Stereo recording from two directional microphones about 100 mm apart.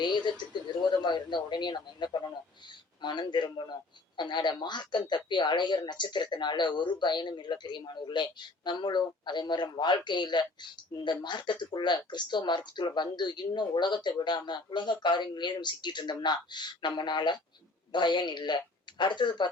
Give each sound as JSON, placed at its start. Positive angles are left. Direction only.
{"t": 0.0, "sound": "speech", "side_deg": 50}